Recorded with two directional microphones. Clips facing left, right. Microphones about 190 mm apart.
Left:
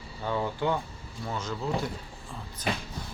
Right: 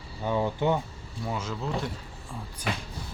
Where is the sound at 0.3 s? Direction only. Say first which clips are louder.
Right 3 dB; 20° right (ahead or behind).